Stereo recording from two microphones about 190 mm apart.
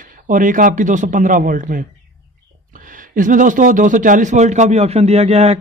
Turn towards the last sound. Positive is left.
turn(degrees=-35)  # may be behind; listen again after turning